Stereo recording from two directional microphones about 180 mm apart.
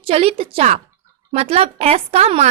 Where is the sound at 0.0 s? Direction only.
30° right (ahead or behind).